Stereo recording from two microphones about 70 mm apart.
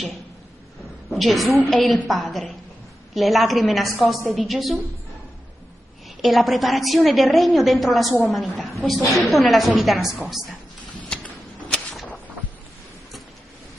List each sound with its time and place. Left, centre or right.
1.1 s a woman's voice: centre
6.2 s a woman's voice: centre
11.1 s a sound: centre